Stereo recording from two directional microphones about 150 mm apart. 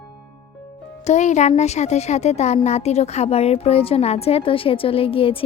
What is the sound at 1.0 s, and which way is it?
A woman's voice, 50° left (ahead or behind).